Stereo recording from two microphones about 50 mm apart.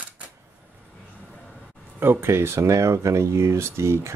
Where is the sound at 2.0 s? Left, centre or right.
Right.